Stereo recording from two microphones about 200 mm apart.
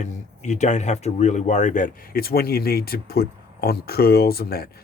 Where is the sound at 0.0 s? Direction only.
35° left (ahead or behind).